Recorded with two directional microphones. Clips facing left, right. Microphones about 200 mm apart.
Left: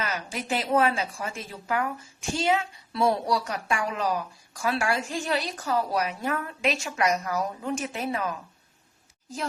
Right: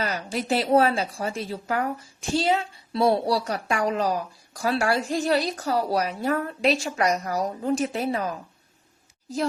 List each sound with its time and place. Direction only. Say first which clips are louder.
0.0 s a woman's voice: right 4 dB; 35° right (ahead or behind)